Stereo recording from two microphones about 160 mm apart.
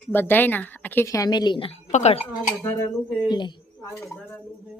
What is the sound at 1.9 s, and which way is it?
Speech, 45° left (ahead or behind).